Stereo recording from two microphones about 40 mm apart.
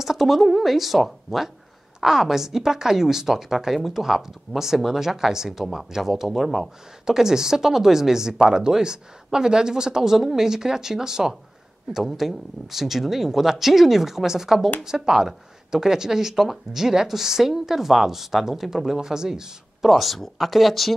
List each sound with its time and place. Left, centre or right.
0.0 s a woman's voice: centre
19.8 s speech: centre